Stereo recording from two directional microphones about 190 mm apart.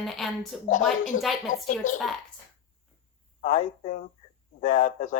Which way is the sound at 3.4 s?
40° left (ahead or behind).